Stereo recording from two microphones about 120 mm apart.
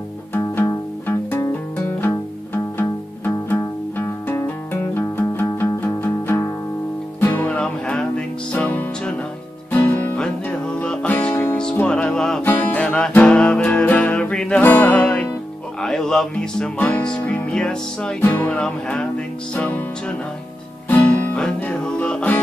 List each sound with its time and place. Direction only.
0.4 s music: 25° left (ahead or behind)
1.9 s music: 15° left (ahead or behind)
12.4 s music: 15° left (ahead or behind)